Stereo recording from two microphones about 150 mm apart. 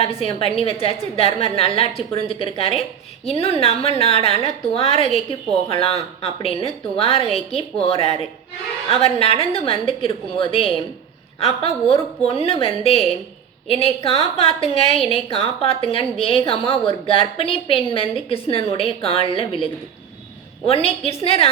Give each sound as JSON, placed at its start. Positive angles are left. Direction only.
{"t": 0.0, "sound": "a woman's voice", "side_deg": 40}
{"t": 20.7, "sound": "a woman's voice", "side_deg": 40}